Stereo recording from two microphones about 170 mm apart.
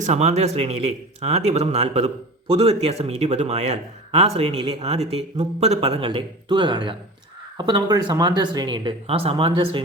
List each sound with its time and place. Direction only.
0.0 s speech: 40° right (ahead or behind)